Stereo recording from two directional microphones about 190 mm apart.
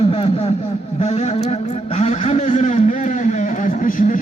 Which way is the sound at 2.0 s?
35° left (ahead or behind).